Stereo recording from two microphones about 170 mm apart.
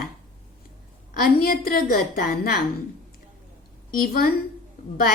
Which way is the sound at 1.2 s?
60° left (ahead or behind).